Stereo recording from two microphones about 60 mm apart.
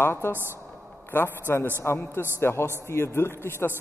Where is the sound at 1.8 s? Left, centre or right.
Left.